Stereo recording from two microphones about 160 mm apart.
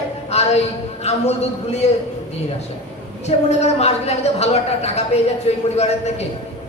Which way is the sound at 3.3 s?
40° left (ahead or behind).